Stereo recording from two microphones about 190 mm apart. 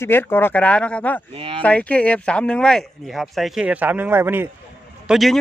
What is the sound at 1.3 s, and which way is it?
Speech, 30° right (ahead or behind).